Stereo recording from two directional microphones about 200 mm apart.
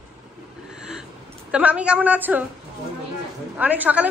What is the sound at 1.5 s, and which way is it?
Speech, 5° right (ahead or behind).